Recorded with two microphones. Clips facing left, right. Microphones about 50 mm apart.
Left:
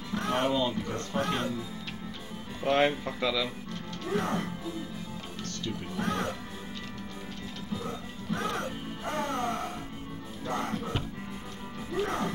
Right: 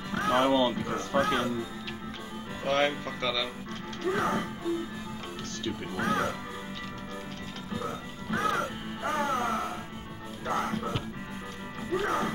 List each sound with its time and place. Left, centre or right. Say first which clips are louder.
0.1 s speech: right 4 dB; right
2.6 s speech: left 2 dB; centre
4.1 s speech: right 2 dB; right
5.9 s speech: right 3 dB; right
7.8 s music: right 2 dB; right
11.9 s speech: right 2 dB; centre